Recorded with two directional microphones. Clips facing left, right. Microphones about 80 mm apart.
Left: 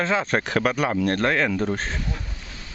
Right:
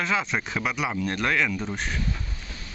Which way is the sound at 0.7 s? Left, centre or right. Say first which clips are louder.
Left 3 dB; left.